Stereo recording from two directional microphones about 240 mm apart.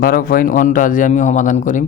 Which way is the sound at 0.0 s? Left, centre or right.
Left.